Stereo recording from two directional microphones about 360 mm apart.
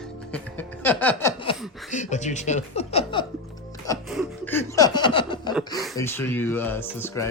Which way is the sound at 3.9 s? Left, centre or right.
Centre.